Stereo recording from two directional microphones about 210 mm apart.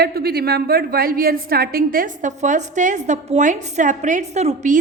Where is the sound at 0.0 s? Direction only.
50° right (ahead or behind).